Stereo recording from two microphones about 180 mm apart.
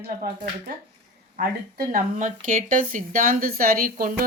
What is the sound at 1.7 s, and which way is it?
A woman's voice, 50° right (ahead or behind).